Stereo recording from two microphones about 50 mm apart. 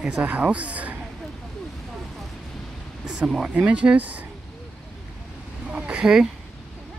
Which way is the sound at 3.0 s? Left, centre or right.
Centre.